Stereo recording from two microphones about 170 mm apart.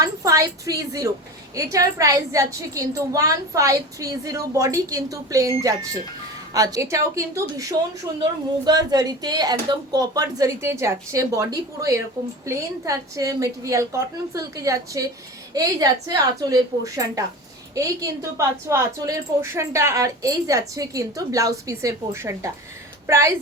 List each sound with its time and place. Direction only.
0.0 s a woman's voice: 20° right (ahead or behind)